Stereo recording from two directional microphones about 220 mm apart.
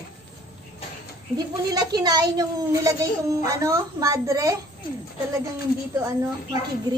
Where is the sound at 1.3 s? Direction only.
20° right (ahead or behind).